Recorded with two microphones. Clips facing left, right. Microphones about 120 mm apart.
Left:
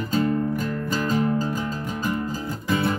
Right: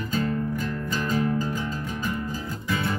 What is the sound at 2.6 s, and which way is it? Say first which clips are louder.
Music: left 5 dB; 35° left (ahead or behind).